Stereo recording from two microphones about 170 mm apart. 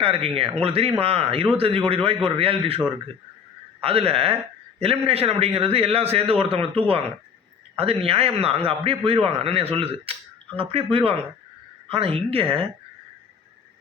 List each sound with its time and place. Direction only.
0.0 s a man's voice: 35° right (ahead or behind)